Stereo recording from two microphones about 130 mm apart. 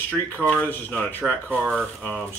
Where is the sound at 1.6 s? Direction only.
Centre (ahead or behind).